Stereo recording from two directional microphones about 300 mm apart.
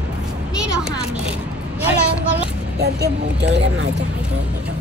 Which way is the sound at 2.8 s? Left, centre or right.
Right.